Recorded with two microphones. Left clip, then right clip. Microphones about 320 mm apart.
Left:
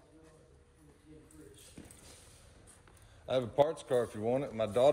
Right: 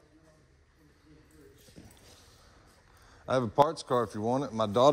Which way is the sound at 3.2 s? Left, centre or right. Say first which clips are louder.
Right 4 dB; right.